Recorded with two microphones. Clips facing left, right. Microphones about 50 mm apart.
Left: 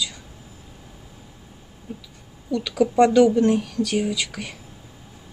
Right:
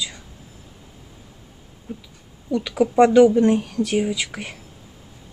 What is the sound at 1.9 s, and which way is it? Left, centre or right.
Speech, centre.